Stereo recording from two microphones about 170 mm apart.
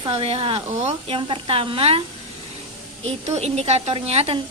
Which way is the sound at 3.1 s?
40° right (ahead or behind).